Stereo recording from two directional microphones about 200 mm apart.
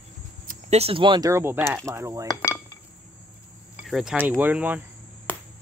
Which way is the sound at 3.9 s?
Centre (ahead or behind).